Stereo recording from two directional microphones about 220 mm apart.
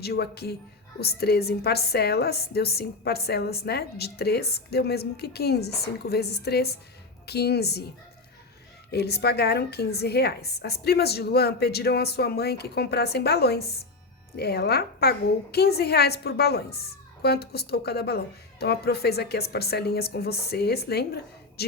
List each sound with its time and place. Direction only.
0.0 s a woman's voice: 45° left (ahead or behind)
8.9 s a woman's voice: 45° left (ahead or behind)